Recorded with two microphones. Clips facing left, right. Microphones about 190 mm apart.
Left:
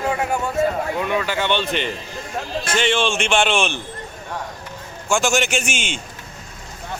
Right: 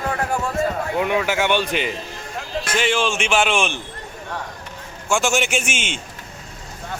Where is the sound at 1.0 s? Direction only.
15° right (ahead or behind).